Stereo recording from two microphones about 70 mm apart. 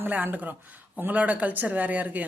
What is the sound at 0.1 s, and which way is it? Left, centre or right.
Speech, right.